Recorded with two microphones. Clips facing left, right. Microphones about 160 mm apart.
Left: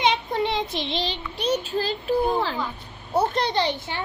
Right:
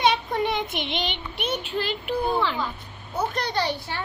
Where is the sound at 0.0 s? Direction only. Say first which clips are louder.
Even; 25° left (ahead or behind).